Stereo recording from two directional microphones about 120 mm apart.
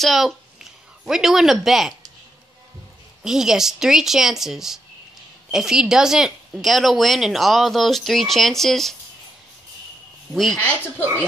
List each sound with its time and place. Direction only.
0.0 s speech: centre (ahead or behind)
3.3 s speech: 5° right (ahead or behind)
10.3 s speech: centre (ahead or behind)